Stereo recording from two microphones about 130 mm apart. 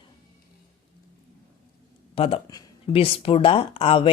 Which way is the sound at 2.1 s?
45° left (ahead or behind).